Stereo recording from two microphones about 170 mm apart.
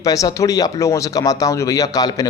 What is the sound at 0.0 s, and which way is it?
A man's voice, 20° left (ahead or behind).